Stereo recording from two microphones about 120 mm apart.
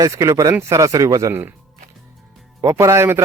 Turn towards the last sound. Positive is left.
turn(degrees=-20)  # may be behind; listen again after turning